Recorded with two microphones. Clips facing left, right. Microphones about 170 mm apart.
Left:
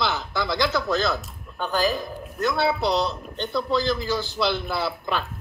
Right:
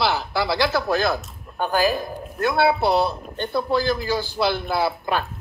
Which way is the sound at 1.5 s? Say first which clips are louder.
Right 3 dB; 50° right (ahead or behind).